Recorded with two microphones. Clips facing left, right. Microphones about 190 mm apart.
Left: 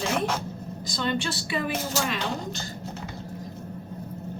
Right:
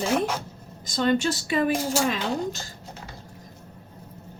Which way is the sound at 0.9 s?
45° right (ahead or behind).